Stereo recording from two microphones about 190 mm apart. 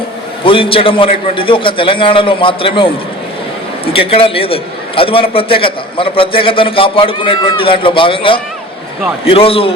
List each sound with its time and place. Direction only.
0.4 s a man's voice: 30° left (ahead or behind)